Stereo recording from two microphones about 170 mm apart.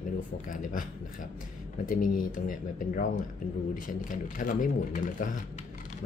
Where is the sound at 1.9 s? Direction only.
55° left (ahead or behind).